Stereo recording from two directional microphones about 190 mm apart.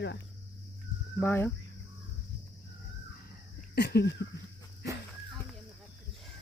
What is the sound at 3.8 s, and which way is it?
Speech, 55° left (ahead or behind).